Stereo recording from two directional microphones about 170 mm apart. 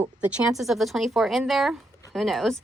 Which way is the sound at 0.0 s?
10° right (ahead or behind).